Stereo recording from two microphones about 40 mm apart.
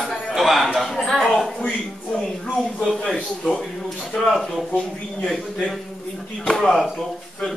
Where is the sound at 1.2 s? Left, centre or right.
Centre.